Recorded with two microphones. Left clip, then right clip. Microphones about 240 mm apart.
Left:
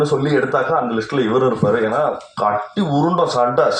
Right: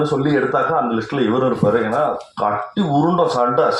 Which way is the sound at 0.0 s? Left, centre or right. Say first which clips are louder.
Left 1 dB; left.